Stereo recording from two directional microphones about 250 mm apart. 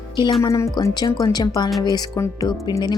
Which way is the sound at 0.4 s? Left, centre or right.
Centre.